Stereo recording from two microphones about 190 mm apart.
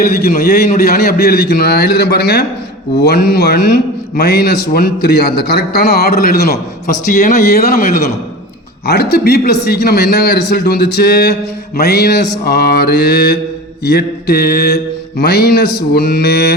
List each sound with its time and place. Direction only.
0.0 s a man's voice: 55° left (ahead or behind)
7.0 s a man's voice: 40° left (ahead or behind); by 16.6 s 60° left (ahead or behind)